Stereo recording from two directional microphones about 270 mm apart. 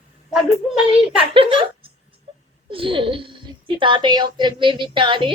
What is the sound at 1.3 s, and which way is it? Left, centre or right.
A woman's voice, centre.